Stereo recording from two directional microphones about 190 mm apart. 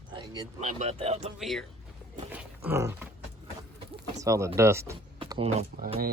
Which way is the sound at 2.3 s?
10° right (ahead or behind).